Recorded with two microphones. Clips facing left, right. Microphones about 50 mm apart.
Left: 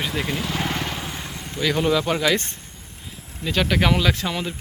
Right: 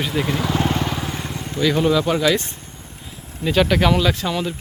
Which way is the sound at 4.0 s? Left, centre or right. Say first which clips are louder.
Right 2 dB; left.